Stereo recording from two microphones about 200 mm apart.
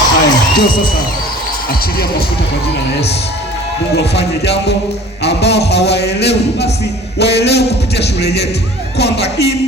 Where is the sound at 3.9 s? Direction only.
55° left (ahead or behind).